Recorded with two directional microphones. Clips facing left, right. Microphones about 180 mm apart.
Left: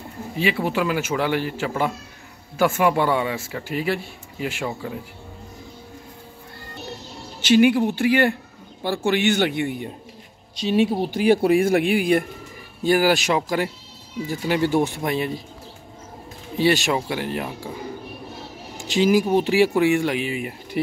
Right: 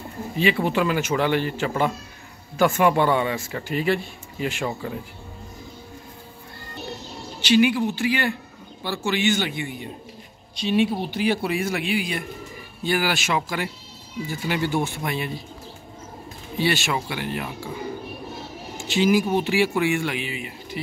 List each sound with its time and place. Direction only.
0.4 s speech: 10° left (ahead or behind)
7.4 s speech: 50° left (ahead or behind)
10.5 s speech: 40° left (ahead or behind)
12.8 s speech: 40° left (ahead or behind)
16.5 s speech: 40° left (ahead or behind)
18.8 s speech: 40° left (ahead or behind)